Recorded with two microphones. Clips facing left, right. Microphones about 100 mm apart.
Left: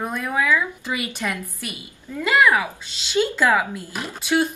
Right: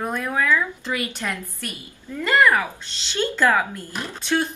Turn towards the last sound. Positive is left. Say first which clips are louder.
# left 2 dB
turn(degrees=10)  # may be behind; listen again after turning